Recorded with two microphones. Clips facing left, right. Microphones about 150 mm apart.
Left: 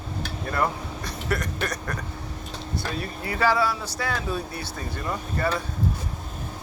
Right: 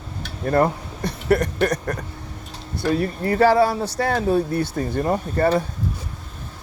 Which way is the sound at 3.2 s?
50° right (ahead or behind).